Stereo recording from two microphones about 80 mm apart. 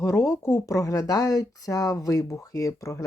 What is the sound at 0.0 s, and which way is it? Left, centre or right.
Speech, left.